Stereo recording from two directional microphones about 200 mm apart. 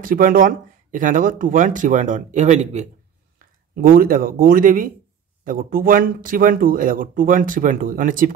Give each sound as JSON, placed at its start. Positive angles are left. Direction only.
{"t": 0.0, "sound": "speech", "side_deg": -45}
{"t": 3.3, "sound": "speech", "side_deg": -45}